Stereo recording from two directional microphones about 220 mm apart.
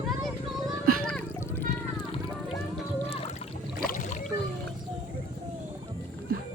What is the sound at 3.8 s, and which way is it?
Boat, 35° left (ahead or behind).